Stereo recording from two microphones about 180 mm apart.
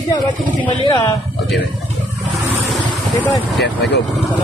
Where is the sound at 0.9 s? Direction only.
20° left (ahead or behind).